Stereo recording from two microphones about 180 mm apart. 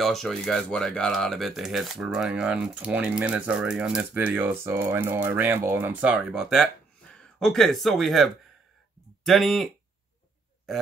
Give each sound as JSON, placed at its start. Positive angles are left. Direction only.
{"t": 0.0, "sound": "speech", "side_deg": 0}